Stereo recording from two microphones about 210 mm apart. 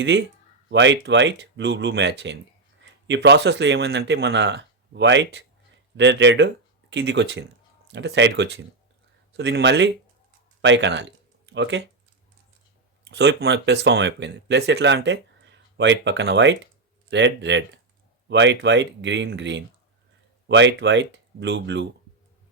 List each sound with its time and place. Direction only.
0.0 s speech: 55° right (ahead or behind)
13.1 s speech: 55° right (ahead or behind)